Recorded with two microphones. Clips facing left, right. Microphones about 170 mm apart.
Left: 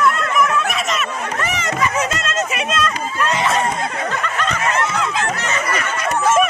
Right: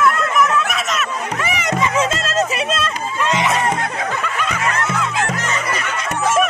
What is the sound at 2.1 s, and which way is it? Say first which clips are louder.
Music: right 3 dB; 35° right (ahead or behind).